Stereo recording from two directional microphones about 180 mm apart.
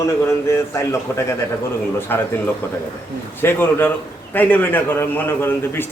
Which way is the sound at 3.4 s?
10° left (ahead or behind).